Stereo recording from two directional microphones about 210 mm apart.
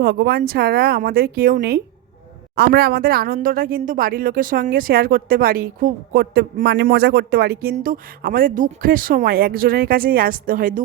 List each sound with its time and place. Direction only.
0.0 s a woman's voice: 45° right (ahead or behind)